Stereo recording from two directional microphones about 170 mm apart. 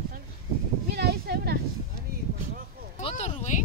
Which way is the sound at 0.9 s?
70° right (ahead or behind).